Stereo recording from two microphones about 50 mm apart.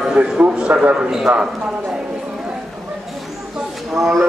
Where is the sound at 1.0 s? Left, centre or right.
Centre.